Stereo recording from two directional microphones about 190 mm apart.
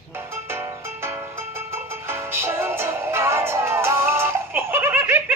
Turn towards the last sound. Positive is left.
turn(degrees=-10)  # may be behind; listen again after turning